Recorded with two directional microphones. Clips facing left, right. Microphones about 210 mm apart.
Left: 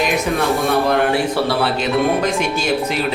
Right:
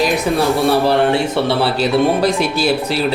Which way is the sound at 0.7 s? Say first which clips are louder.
Right 2 dB; 30° right (ahead or behind).